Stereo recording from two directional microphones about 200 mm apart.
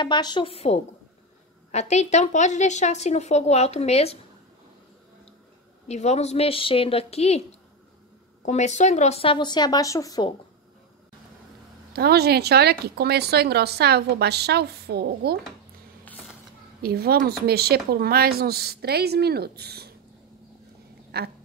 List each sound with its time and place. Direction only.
0.0 s a woman's voice: 20° left (ahead or behind)
5.9 s a woman's voice: 35° left (ahead or behind); by 10.3 s 20° left (ahead or behind)
11.9 s speech: 50° right (ahead or behind)
16.1 s a sound: centre (ahead or behind)
16.8 s speech: 50° right (ahead or behind)
21.1 s speech: 55° right (ahead or behind)